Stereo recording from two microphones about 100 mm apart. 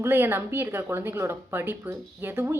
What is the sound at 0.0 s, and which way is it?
Speech, 20° right (ahead or behind).